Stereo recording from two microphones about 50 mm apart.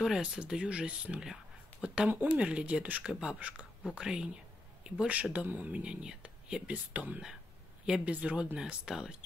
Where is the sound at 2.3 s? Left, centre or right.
Right.